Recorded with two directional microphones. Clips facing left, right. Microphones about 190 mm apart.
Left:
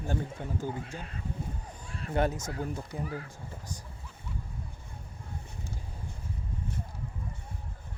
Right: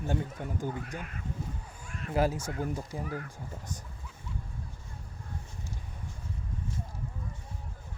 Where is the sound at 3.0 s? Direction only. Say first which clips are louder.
Right 1 dB; 30° left (ahead or behind).